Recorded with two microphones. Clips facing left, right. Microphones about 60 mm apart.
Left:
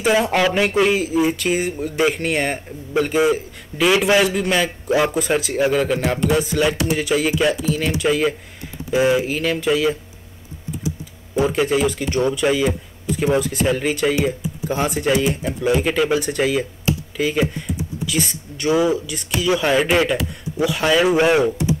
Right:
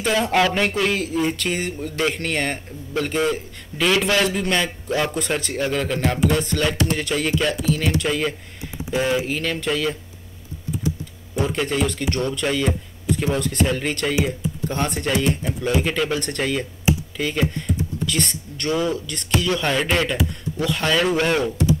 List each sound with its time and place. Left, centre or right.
0.0 s speech: centre
11.4 s speech: centre
16.9 s computer keyboard: centre
17.2 s speech: centre